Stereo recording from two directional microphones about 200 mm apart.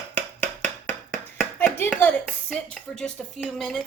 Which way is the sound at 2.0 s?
5° left (ahead or behind).